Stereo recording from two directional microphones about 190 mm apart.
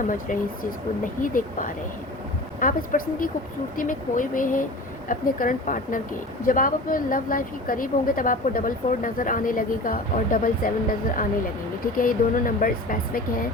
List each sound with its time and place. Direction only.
0.1 s a woman's voice: 45° left (ahead or behind)